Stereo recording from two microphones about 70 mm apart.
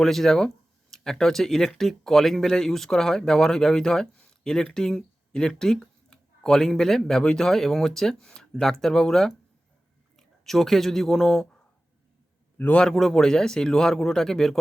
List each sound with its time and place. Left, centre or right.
0.0 s speech: centre
12.5 s a man's voice: left
12.8 s speech: centre